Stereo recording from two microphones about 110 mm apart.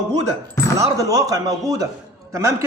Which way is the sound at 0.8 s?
35° right (ahead or behind).